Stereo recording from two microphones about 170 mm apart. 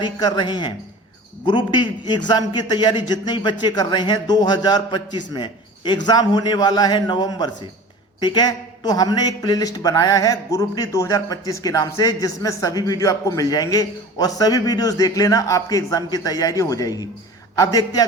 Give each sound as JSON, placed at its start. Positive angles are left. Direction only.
{"t": 0.0, "sound": "a man's voice", "side_deg": 25}